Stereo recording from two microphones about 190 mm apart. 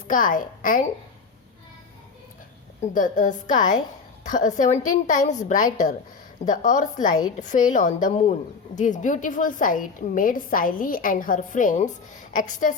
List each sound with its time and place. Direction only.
0.1 s a woman's voice: 45° left (ahead or behind)
2.9 s a woman's voice: 45° left (ahead or behind)